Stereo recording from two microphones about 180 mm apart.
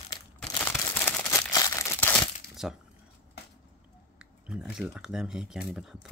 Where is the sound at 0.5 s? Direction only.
10° left (ahead or behind).